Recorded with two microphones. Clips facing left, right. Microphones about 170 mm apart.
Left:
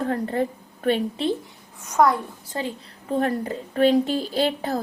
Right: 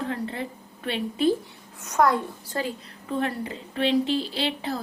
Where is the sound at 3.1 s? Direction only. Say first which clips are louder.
Left 4 dB; 40° left (ahead or behind).